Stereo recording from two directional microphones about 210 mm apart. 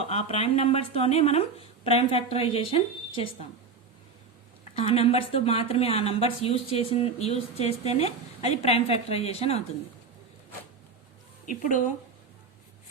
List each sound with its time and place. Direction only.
0.0 s speech: 30° left (ahead or behind)
4.7 s speech: 30° left (ahead or behind)